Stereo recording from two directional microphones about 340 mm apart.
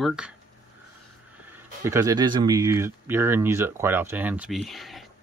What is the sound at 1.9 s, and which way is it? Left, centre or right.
Speech, centre.